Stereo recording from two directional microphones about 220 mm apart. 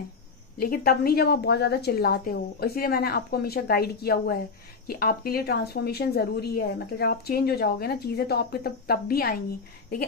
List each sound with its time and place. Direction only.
0.6 s speech: 45° left (ahead or behind)